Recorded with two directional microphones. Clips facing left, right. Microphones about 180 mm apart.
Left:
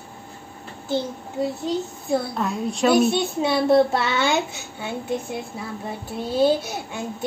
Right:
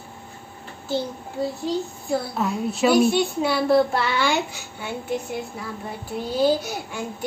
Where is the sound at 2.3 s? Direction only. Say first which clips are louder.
Even; 5° right (ahead or behind).